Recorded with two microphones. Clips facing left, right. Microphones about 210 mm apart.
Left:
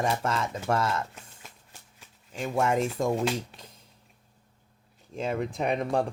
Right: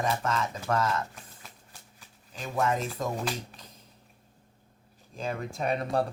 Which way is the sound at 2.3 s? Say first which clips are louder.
Left 3 dB; 25° left (ahead or behind).